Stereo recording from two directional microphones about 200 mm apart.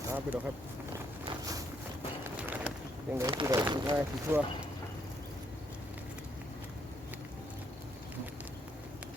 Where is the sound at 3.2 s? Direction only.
15° right (ahead or behind).